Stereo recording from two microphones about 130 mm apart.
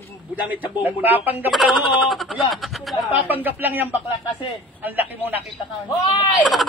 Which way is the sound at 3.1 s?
15° right (ahead or behind).